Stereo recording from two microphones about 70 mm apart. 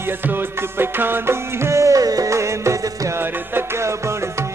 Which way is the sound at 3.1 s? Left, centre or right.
Right.